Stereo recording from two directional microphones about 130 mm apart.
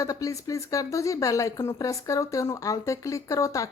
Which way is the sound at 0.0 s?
25° left (ahead or behind).